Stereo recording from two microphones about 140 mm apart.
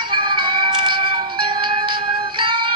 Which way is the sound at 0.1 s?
35° right (ahead or behind).